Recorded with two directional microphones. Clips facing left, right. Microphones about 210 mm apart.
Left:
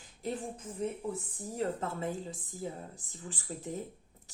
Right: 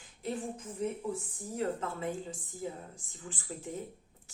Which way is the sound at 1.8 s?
40° left (ahead or behind).